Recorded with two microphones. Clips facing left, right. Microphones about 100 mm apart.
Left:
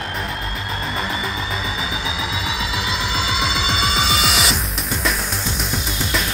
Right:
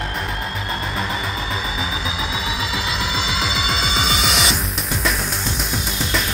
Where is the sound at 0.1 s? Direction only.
Centre (ahead or behind).